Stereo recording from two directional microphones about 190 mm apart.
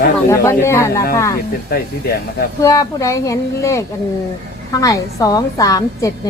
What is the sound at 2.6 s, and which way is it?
A woman's voice, 15° left (ahead or behind).